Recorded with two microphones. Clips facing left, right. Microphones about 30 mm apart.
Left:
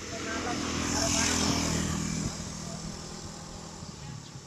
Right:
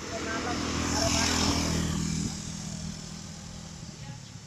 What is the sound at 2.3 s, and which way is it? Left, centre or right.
Vehicle, left.